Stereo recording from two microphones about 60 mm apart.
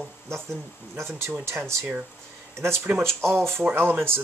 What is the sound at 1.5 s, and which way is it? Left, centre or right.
Speech, right.